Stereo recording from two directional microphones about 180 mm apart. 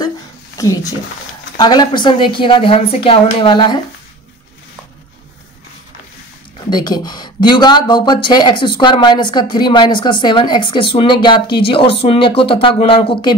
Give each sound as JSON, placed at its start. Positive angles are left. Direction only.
{"t": 0.6, "sound": "speech", "side_deg": 15}
{"t": 6.7, "sound": "speech", "side_deg": 25}